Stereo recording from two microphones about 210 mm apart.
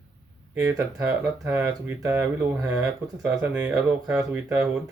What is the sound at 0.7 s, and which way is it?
Speech, 15° right (ahead or behind).